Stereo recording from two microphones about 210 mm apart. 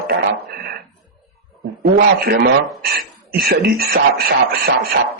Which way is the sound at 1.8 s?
45° right (ahead or behind).